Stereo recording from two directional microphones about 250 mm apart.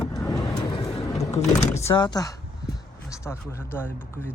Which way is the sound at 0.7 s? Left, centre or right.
Left.